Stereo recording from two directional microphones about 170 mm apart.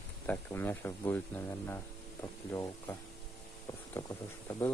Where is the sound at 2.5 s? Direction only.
15° left (ahead or behind).